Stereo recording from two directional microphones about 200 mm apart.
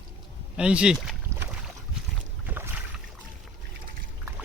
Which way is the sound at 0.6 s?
5° right (ahead or behind).